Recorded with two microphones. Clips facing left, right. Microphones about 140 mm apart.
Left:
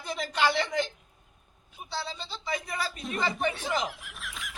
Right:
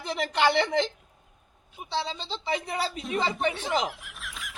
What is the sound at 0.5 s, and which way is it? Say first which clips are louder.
Speech: right 4 dB; 65° right (ahead or behind).